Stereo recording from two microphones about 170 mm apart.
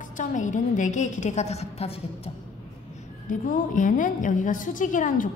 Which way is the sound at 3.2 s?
50° left (ahead or behind).